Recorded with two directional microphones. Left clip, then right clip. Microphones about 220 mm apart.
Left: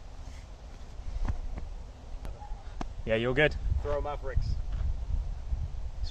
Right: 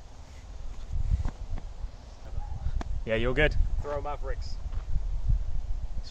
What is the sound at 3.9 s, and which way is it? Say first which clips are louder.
Speech: even; 25° right (ahead or behind).